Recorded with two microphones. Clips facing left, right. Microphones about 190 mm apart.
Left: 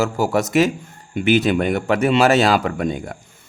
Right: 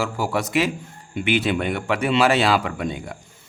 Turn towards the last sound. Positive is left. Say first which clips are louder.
# left 5 dB
turn(degrees=45)  # may be behind; listen again after turning